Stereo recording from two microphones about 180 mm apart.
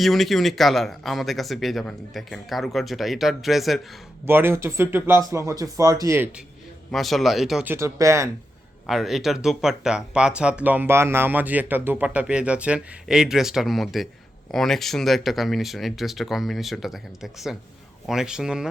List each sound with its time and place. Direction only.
0.0 s speech: centre (ahead or behind)
4.3 s speech: 10° right (ahead or behind)
6.9 s speech: centre (ahead or behind); by 8.3 s 15° right (ahead or behind)
8.9 s speech: centre (ahead or behind)